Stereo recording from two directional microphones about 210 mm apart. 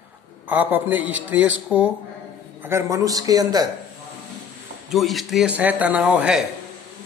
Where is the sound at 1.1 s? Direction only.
65° right (ahead or behind).